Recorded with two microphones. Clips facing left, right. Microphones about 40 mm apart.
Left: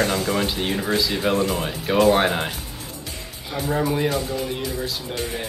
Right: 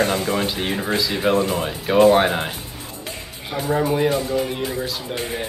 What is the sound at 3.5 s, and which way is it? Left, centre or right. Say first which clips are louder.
Speech: right 2 dB; centre.